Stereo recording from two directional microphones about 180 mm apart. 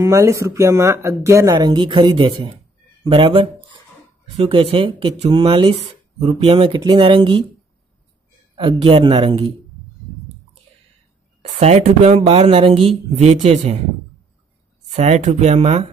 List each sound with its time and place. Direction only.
0.0 s speech: 15° right (ahead or behind)
3.1 s a sound: 30° right (ahead or behind)
4.5 s speech: 30° right (ahead or behind)
8.5 s speech: 30° right (ahead or behind)
11.6 s speech: 35° right (ahead or behind)
15.0 s speech: 40° right (ahead or behind)